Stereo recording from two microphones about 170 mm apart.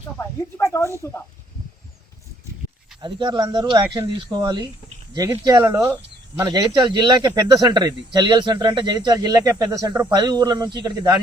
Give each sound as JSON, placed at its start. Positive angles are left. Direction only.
{"t": 0.2, "sound": "speech", "side_deg": 15}
{"t": 3.0, "sound": "speech", "side_deg": -25}